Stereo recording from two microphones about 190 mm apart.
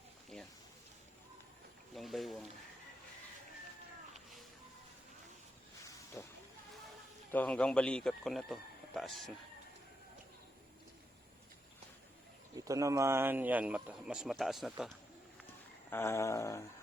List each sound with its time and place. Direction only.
2.0 s speech: centre (ahead or behind)
4.1 s music: centre (ahead or behind)
6.2 s hiss: 15° left (ahead or behind)
7.3 s speech: 10° left (ahead or behind)
12.5 s speech: 15° right (ahead or behind); by 14.9 s centre (ahead or behind)
15.9 s a sound: 15° left (ahead or behind)